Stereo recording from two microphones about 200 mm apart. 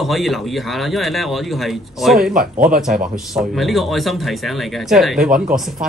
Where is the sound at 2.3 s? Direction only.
45° right (ahead or behind).